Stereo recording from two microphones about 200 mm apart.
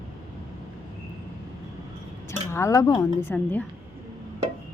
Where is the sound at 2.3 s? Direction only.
15° left (ahead or behind).